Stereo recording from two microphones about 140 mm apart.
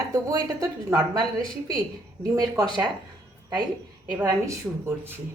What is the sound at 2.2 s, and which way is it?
Speech, 25° right (ahead or behind).